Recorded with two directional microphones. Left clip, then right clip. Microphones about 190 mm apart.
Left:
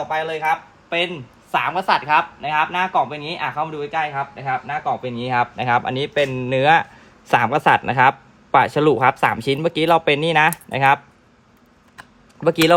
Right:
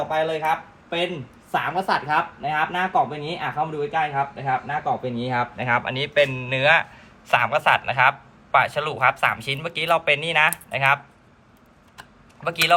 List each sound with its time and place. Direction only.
0.2 s speech: centre (ahead or behind)
1.5 s speech: 20° left (ahead or behind)
5.1 s speech: 30° left (ahead or behind)
5.5 s speech: 55° left (ahead or behind)
12.4 s speech: 60° left (ahead or behind)